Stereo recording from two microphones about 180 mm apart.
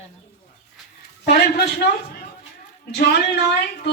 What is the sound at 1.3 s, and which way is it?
Speech, 60° left (ahead or behind).